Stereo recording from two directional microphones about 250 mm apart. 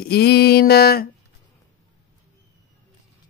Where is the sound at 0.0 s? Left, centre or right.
Left.